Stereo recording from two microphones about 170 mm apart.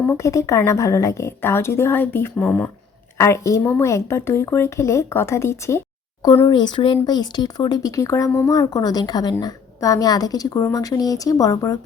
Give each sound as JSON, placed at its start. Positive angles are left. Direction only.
{"t": 0.0, "sound": "a woman's voice", "side_deg": 15}
{"t": 6.2, "sound": "speech", "side_deg": 30}